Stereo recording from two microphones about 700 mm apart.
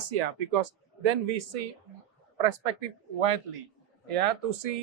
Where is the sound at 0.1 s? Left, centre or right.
Right.